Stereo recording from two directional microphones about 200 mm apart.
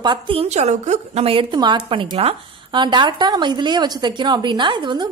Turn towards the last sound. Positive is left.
turn(degrees=-25)  # may be behind; listen again after turning